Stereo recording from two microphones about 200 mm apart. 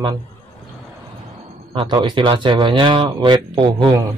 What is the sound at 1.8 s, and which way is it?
Speech, 20° right (ahead or behind).